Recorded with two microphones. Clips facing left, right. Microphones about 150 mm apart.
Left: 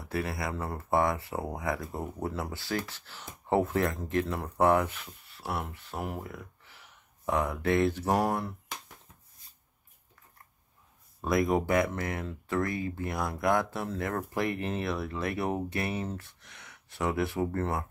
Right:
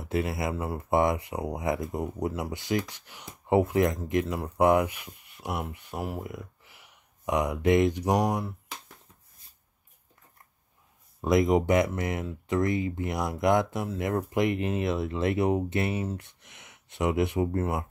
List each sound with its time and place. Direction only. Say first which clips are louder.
0.0 s speech: right 4 dB; 20° right (ahead or behind)
11.1 s speech: right 4 dB; 20° right (ahead or behind)